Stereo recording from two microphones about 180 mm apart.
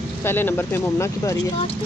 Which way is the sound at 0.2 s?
10° left (ahead or behind).